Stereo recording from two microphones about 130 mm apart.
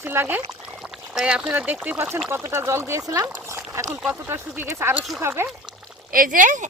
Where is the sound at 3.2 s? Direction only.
20° right (ahead or behind).